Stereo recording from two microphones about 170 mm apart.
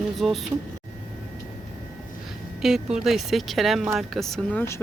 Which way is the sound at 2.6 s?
5° right (ahead or behind).